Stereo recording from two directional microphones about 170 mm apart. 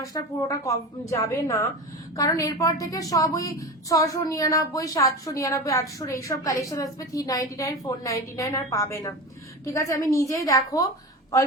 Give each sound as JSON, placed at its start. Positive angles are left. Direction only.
{"t": 0.0, "sound": "a woman's voice", "side_deg": 20}